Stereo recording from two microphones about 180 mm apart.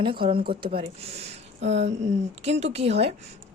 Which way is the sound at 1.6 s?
80° right.